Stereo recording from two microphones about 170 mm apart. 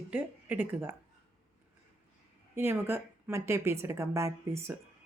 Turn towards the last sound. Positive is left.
turn(degrees=-15)  # may be behind; listen again after turning